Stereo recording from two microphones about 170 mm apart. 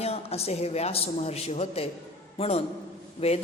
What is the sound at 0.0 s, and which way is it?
A woman's voice, 35° left (ahead or behind).